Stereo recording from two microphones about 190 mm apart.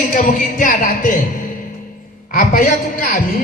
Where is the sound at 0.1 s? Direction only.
45° left (ahead or behind).